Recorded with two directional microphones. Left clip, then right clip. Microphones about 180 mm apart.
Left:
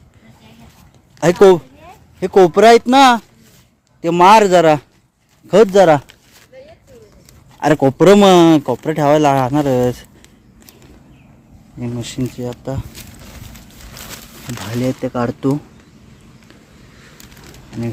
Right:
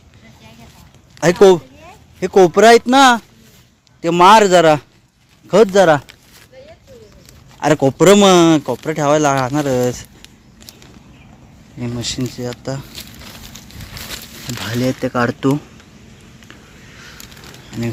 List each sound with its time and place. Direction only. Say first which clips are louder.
1.2 s a man's voice: even; 15° left (ahead or behind)
5.7 s speech: left 2 dB; 30° left (ahead or behind)
7.6 s speech: left 1 dB; 20° left (ahead or behind)
11.8 s a man's voice: right 1 dB; 10° left (ahead or behind)
14.4 s speech: right 1 dB; 5° left (ahead or behind)